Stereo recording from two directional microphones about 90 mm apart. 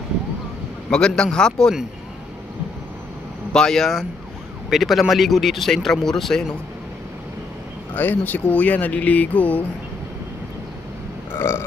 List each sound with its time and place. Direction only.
0.8 s speech: 10° left (ahead or behind)
3.5 s speech: 5° left (ahead or behind)
7.9 s speech: 20° left (ahead or behind)
11.3 s burping: 25° left (ahead or behind)